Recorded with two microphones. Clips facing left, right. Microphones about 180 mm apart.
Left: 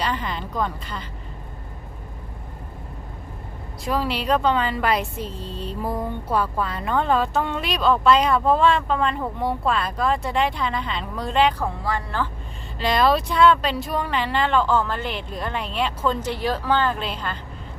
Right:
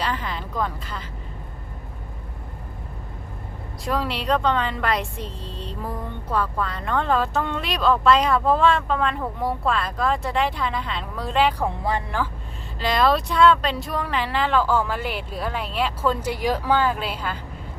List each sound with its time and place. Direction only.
0.0 s a woman's voice: centre (ahead or behind)
3.8 s a woman's voice: centre (ahead or behind)
11.6 s speech: 20° right (ahead or behind)
12.8 s a woman's voice: centre (ahead or behind)